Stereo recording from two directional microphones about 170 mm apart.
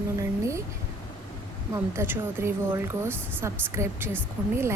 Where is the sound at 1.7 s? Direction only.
15° right (ahead or behind).